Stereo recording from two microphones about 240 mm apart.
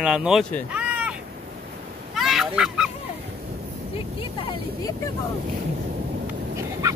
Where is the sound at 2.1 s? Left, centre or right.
Centre.